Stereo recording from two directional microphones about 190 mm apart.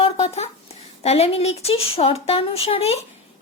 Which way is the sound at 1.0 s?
35° left (ahead or behind).